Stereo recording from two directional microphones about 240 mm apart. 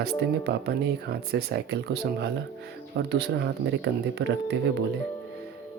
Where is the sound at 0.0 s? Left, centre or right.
Right.